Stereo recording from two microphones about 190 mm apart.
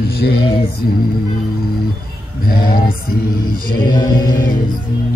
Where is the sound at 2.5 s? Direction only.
50° left (ahead or behind).